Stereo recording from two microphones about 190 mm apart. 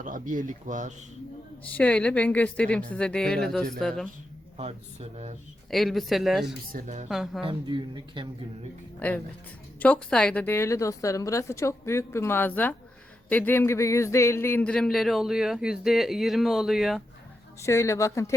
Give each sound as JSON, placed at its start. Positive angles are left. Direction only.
{"t": 0.0, "sound": "speech", "side_deg": -45}
{"t": 1.7, "sound": "speech", "side_deg": 5}
{"t": 4.5, "sound": "speech", "side_deg": -35}
{"t": 5.7, "sound": "speech", "side_deg": 0}
{"t": 6.7, "sound": "speech", "side_deg": -40}
{"t": 7.1, "sound": "speech", "side_deg": 0}
{"t": 7.4, "sound": "speech", "side_deg": -25}
{"t": 9.0, "sound": "a woman's voice", "side_deg": 10}
{"t": 17.6, "sound": "a woman's voice", "side_deg": 15}